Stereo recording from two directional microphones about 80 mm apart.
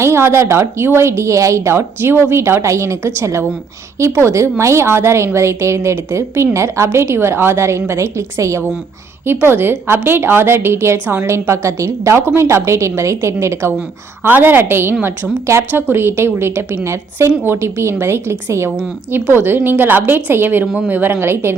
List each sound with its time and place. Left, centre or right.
0.0 s a woman's voice: right
11.3 s a woman's voice: right